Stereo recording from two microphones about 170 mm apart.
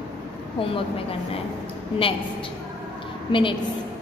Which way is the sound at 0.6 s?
35° left (ahead or behind).